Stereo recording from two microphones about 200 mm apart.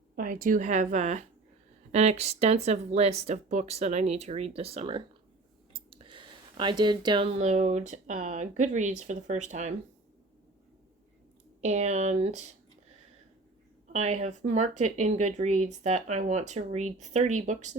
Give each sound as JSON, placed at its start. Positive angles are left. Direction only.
{"t": 0.2, "sound": "speech", "side_deg": -45}
{"t": 11.6, "sound": "speech", "side_deg": -35}
{"t": 13.8, "sound": "speech", "side_deg": -35}